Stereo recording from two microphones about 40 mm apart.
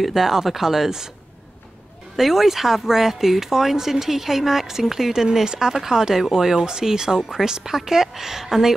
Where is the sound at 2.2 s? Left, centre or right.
Centre.